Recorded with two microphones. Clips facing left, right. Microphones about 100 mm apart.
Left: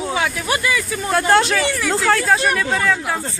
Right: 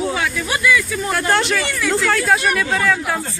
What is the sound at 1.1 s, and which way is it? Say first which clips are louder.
Speech: left 4 dB; 25° left (ahead or behind).